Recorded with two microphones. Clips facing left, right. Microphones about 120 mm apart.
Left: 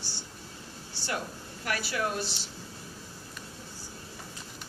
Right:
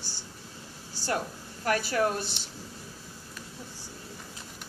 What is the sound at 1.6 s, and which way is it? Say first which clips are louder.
Speech: right 5 dB; 40° right (ahead or behind).